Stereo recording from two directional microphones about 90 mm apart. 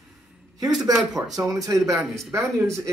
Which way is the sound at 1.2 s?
20° right (ahead or behind).